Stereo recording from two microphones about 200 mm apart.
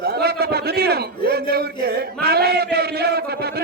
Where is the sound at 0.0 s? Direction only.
50° right (ahead or behind).